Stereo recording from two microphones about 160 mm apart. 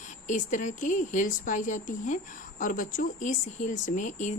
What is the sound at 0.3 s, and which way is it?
A woman's voice, 50° left (ahead or behind).